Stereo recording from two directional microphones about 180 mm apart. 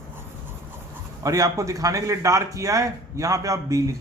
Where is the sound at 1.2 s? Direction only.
20° right (ahead or behind).